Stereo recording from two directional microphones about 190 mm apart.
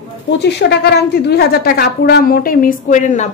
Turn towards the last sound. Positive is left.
turn(degrees=40)  # may be behind; listen again after turning